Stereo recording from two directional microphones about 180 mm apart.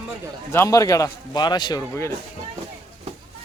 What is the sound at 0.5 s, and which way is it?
A man's voice, 15° left (ahead or behind).